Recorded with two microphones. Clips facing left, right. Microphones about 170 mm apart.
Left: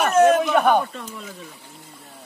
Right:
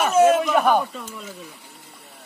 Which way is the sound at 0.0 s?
5° right (ahead or behind).